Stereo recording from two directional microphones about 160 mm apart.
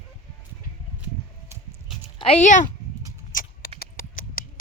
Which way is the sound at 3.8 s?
60° left (ahead or behind).